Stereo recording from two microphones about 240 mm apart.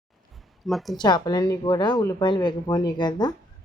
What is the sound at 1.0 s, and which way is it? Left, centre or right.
Speech, centre.